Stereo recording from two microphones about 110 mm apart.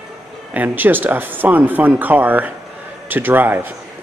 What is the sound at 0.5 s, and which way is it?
Speech, 15° right (ahead or behind).